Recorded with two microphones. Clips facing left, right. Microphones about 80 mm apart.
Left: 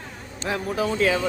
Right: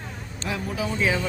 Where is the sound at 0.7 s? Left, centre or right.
Left.